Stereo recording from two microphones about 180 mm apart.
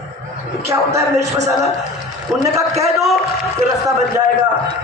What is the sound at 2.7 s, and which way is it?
Speech, 35° right (ahead or behind).